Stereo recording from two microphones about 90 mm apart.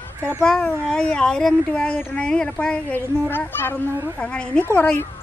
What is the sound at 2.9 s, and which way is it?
Speech, 25° left (ahead or behind).